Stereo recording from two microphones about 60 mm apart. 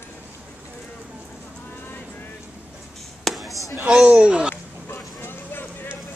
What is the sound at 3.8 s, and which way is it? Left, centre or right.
Speech, centre.